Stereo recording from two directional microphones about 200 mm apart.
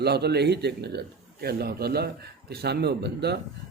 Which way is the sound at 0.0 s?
55° right (ahead or behind).